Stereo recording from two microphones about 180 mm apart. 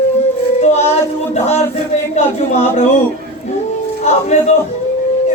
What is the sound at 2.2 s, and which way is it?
Speech, 40° left (ahead or behind).